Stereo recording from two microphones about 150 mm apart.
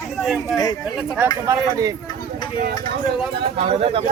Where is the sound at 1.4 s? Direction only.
20° right (ahead or behind).